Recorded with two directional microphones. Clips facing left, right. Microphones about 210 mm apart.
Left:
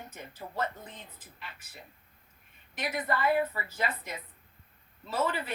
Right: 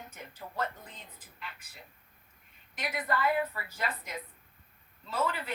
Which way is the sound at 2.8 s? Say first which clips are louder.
Left 1 dB; 25° left (ahead or behind).